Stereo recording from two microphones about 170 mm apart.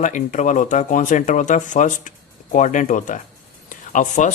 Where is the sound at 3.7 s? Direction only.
45° left (ahead or behind).